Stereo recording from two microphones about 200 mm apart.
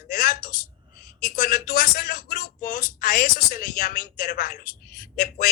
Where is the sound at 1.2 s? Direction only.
45° left (ahead or behind).